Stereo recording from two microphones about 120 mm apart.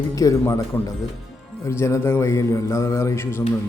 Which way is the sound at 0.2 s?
25° left (ahead or behind).